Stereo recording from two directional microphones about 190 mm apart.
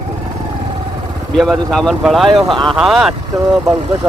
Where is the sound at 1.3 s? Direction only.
Centre (ahead or behind).